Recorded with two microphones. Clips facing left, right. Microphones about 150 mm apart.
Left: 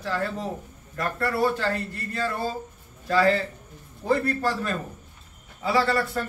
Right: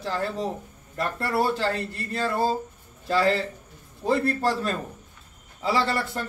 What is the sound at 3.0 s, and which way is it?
A man's voice, 30° right (ahead or behind).